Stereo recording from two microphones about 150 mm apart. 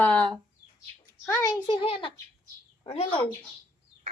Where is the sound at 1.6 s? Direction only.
35° left (ahead or behind).